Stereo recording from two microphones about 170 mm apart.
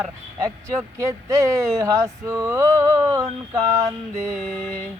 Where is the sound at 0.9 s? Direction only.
20° right (ahead or behind).